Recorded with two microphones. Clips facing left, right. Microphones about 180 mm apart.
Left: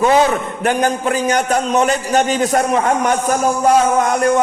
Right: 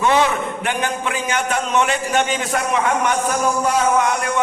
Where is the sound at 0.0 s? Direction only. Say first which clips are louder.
Left 4 dB; 40° left (ahead or behind).